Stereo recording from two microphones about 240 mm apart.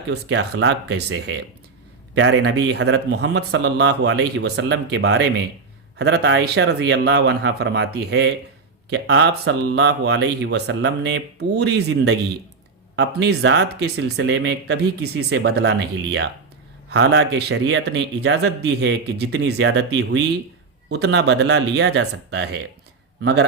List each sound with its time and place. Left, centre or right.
0.1 s speech: right
16.9 s speech: right